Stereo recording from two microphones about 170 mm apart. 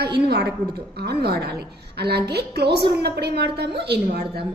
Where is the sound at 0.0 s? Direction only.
75° right (ahead or behind).